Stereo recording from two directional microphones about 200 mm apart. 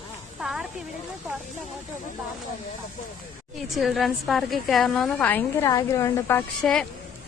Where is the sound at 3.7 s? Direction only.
Centre (ahead or behind).